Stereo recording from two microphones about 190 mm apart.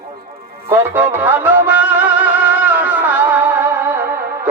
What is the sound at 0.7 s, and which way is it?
Music, 10° right (ahead or behind).